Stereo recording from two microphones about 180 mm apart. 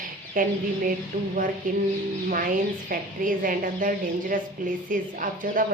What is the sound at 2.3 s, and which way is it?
A woman's voice, 50° right (ahead or behind).